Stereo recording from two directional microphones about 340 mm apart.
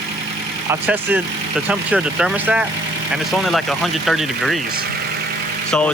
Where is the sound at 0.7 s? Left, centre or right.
Centre.